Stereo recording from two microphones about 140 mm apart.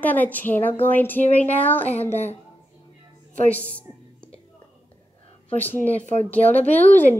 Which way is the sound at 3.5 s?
10° left (ahead or behind).